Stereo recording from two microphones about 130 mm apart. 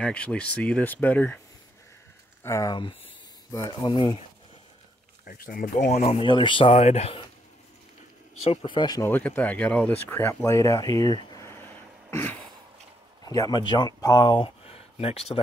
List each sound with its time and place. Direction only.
0.0 s speech: 10° left (ahead or behind)
2.4 s speech: 20° left (ahead or behind)
2.7 s speech: 40° left (ahead or behind)
5.3 s speech: 90° left; by 6.2 s 55° left (ahead or behind)
6.2 s speech: 40° left (ahead or behind)
6.7 s speech: 60° left (ahead or behind)
8.5 s speech: 40° left (ahead or behind)
9.0 s speech: 15° left (ahead or behind); by 11.4 s 35° left (ahead or behind)
11.4 s vehicle: 20° left (ahead or behind)
13.2 s speech: 30° left (ahead or behind); by 15.4 s 50° left (ahead or behind)